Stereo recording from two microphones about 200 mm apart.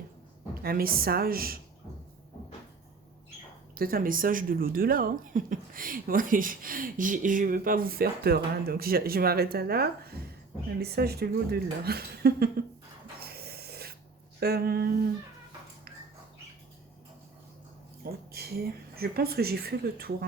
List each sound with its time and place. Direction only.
0.6 s speech: 50° right (ahead or behind)
3.8 s speech: 45° right (ahead or behind)
13.1 s a sound: 50° right (ahead or behind)
14.3 s speech: 50° right (ahead or behind)
18.0 s speech: 50° right (ahead or behind)